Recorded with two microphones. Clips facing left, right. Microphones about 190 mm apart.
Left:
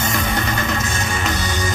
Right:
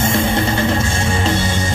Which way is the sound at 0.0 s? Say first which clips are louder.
Right 5 dB; 30° right (ahead or behind).